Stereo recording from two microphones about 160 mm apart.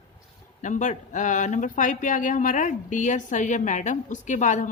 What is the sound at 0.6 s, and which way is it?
Speech, 50° left (ahead or behind).